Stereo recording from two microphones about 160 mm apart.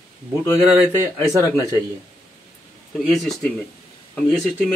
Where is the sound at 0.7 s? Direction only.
20° right (ahead or behind).